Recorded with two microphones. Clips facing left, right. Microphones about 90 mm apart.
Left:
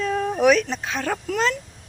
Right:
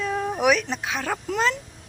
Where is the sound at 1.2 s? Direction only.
20° right (ahead or behind).